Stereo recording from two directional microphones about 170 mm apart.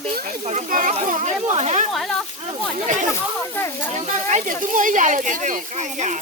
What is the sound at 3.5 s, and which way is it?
Speech, 15° left (ahead or behind).